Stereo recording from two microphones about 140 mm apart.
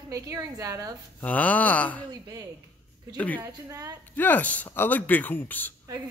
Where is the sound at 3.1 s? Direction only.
10° left (ahead or behind).